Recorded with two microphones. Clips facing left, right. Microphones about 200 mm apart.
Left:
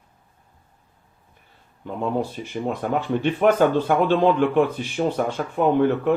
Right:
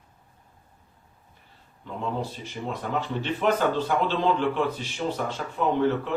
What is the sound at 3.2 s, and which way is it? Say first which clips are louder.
A man's voice: left 7 dB; 55° left (ahead or behind).